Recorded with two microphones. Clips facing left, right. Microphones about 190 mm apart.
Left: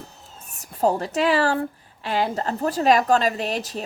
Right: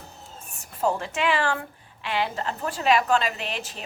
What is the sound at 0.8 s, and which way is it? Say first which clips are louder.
A woman's voice: left 4 dB; 40° left (ahead or behind).